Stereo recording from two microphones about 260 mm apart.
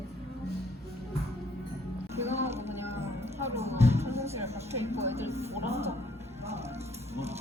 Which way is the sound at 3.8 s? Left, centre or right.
Right.